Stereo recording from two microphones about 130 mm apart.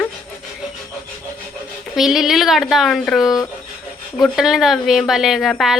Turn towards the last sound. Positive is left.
turn(degrees=0)  # may be behind; listen again after turning